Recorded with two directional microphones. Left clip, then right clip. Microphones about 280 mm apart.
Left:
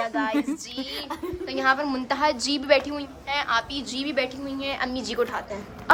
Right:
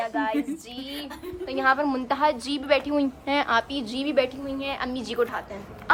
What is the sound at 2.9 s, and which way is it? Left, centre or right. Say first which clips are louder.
A woman's voice: right 4 dB; centre.